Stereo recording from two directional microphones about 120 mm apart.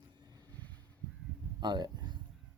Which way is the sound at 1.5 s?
35° right (ahead or behind).